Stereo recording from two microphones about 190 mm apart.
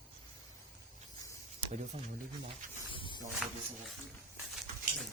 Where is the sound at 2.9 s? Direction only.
25° left (ahead or behind).